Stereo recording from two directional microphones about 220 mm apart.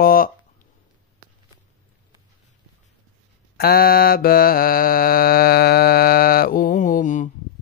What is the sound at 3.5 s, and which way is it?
Mantra, 45° left (ahead or behind).